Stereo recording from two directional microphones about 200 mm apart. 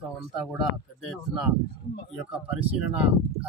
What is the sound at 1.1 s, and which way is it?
Speech, centre (ahead or behind).